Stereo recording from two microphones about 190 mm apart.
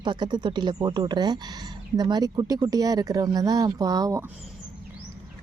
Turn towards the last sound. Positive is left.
turn(degrees=-20)  # may be behind; listen again after turning